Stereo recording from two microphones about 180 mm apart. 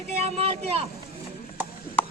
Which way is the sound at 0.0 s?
35° right (ahead or behind).